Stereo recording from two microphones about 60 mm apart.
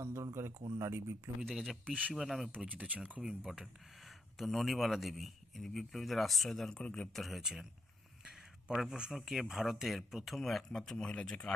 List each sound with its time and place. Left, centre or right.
0.0 s speech: right
1.5 s speech: centre
2.6 s speech: right
3.2 s speech: centre
6.8 s speech: centre
7.1 s speech: centre